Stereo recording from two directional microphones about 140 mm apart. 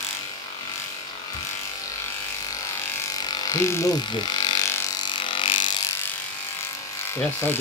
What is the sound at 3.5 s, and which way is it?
Speech, 20° left (ahead or behind).